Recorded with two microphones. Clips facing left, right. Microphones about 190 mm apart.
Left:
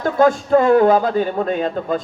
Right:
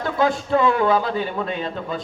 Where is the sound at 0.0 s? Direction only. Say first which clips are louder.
Left 6 dB; 45° left (ahead or behind).